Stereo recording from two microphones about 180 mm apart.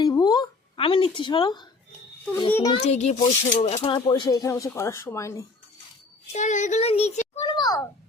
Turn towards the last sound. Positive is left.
turn(degrees=20)  # may be behind; listen again after turning